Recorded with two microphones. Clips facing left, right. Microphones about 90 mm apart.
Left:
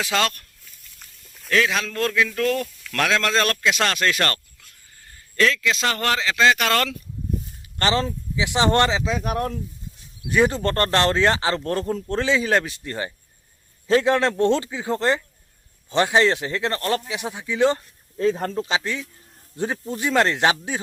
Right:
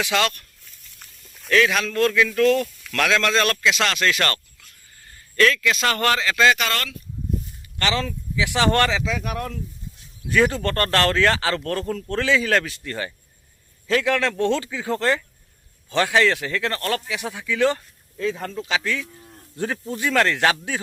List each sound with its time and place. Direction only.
0.0 s speech: 35° left (ahead or behind)
0.9 s livestock: centre (ahead or behind)
1.5 s speech: 25° left (ahead or behind)
2.2 s a man's voice: 15° left (ahead or behind)
2.9 s speech: 30° left (ahead or behind)
5.4 s a man's voice: 15° left (ahead or behind)
7.8 s speech: 35° left (ahead or behind)
10.2 s speech: 20° left (ahead or behind)
18.2 s speech: 40° left (ahead or behind)
18.7 s speech: 25° left (ahead or behind)